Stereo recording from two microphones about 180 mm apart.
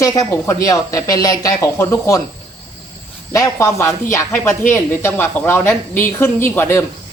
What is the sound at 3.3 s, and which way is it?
Speech, 15° left (ahead or behind).